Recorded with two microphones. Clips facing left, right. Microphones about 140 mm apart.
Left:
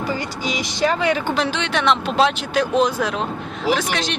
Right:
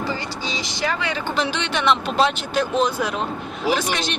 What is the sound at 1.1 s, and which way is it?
Speech, centre (ahead or behind).